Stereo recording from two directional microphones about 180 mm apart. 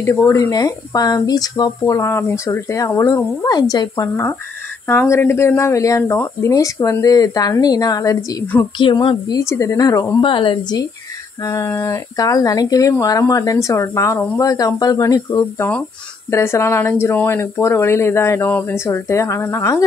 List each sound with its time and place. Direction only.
0.0 s speech: 15° left (ahead or behind)
11.4 s speech: 15° left (ahead or behind)